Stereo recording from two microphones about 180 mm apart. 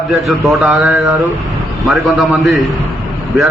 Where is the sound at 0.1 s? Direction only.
Centre (ahead or behind).